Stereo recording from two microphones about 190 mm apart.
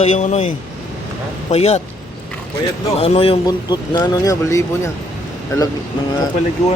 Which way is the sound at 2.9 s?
30° left (ahead or behind).